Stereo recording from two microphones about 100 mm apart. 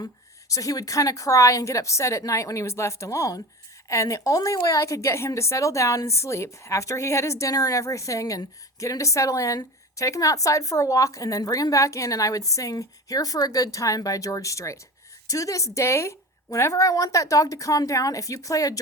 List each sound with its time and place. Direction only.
0.0 s a woman's voice: 35° left (ahead or behind)